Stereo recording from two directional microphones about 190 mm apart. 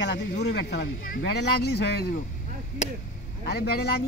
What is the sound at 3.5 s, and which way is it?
Speech, 55° left (ahead or behind).